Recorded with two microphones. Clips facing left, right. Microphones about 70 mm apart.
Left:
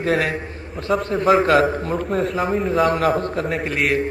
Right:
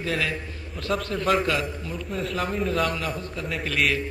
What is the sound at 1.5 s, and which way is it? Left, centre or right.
Speech, left.